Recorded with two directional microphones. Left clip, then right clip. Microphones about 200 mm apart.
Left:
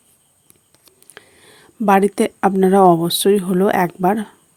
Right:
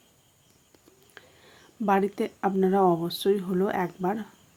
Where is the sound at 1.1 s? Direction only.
40° left (ahead or behind).